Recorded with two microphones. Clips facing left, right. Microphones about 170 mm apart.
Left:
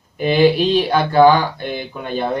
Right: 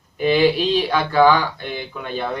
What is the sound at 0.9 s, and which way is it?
Speech, 35° left (ahead or behind).